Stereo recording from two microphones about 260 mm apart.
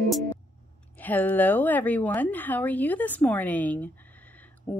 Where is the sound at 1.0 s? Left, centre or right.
Centre.